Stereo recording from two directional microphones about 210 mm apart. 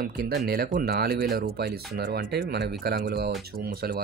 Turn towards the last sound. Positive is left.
turn(degrees=-45)  # may be behind; listen again after turning